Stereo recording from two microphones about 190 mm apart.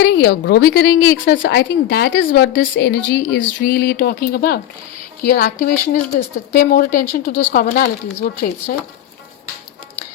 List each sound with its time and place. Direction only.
0.0 s speech: 65° left (ahead or behind); by 8.7 s 50° left (ahead or behind)